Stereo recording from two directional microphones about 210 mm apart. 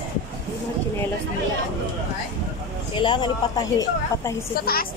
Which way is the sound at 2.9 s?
20° left (ahead or behind).